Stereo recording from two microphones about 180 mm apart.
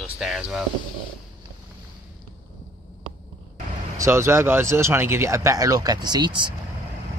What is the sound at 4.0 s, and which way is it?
Speech, 15° right (ahead or behind).